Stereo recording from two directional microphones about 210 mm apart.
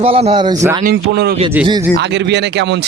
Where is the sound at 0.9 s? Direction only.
50° right (ahead or behind).